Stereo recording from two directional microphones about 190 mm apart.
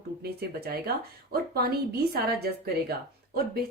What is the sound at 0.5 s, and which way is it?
A woman's voice, 55° right (ahead or behind).